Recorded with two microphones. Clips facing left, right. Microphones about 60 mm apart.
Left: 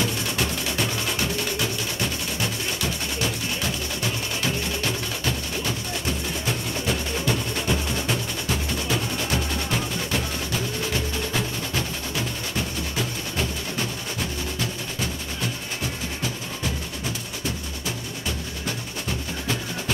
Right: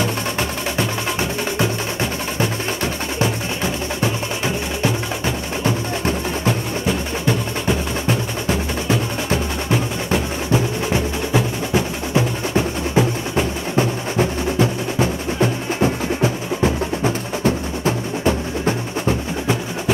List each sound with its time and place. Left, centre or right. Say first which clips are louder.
0.0 s music: right 4 dB; right
6.9 s music: right 5 dB; centre